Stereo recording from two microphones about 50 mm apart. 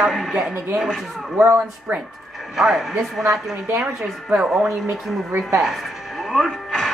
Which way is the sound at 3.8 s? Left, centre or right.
Centre.